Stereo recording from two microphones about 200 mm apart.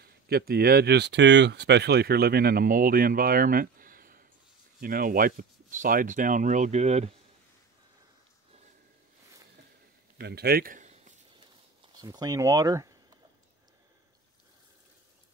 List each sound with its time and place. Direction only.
0.0 s speech: 50° right (ahead or behind); by 7.1 s 35° right (ahead or behind)
10.1 s a sound: 55° right (ahead or behind); by 11.1 s 40° right (ahead or behind)
11.9 s speech: 20° right (ahead or behind)